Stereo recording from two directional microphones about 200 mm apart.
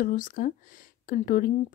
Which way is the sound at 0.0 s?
40° left (ahead or behind).